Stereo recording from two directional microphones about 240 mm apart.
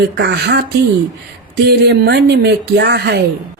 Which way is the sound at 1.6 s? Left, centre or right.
Right.